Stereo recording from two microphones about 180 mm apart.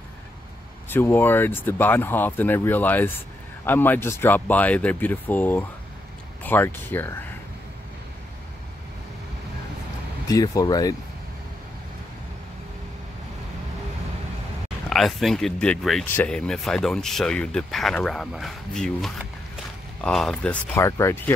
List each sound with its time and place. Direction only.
0.8 s speech: 10° left (ahead or behind)
10.2 s speech: 20° left (ahead or behind)
14.9 s speech: centre (ahead or behind)
20.7 s speech: 15° left (ahead or behind)